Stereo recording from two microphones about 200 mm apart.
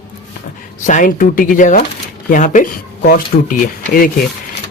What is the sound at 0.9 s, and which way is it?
Speech, 40° left (ahead or behind).